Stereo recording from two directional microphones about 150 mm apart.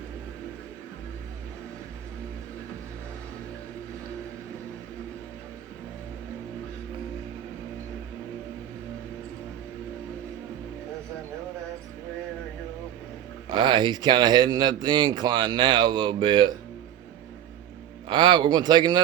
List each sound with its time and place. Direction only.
13.5 s speech: 30° right (ahead or behind)
18.1 s speech: 30° right (ahead or behind)